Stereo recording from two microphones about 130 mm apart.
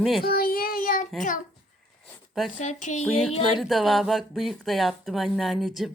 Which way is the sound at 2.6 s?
65° left (ahead or behind).